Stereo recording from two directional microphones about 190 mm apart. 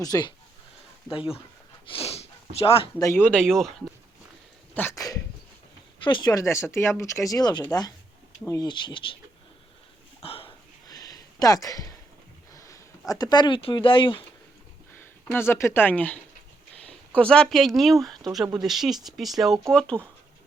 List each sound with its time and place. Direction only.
0.0 s speech: 20° left (ahead or behind)
1.9 s a sound: 30° left (ahead or behind)
3.0 s speech: 10° left (ahead or behind)
10.2 s a sound: 30° left (ahead or behind)
12.5 s speech: 15° left (ahead or behind)
14.9 s speech: 10° left (ahead or behind)